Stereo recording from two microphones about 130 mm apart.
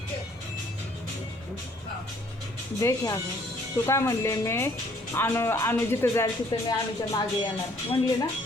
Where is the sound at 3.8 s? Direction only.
20° left (ahead or behind).